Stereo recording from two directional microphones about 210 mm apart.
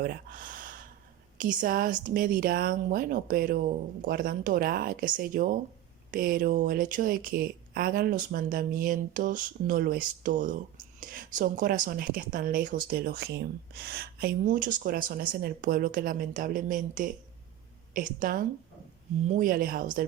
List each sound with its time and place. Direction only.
0.0 s speech: 45° right (ahead or behind)